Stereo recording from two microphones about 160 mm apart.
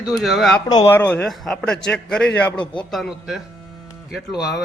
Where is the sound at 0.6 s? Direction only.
25° left (ahead or behind).